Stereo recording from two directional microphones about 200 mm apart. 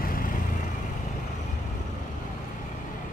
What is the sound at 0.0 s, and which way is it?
Vehicle, 45° left (ahead or behind).